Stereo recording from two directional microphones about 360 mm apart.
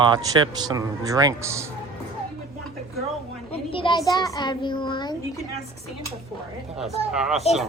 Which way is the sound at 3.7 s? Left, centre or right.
Centre.